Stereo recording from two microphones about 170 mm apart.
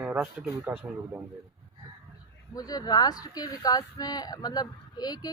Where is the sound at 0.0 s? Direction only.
10° right (ahead or behind).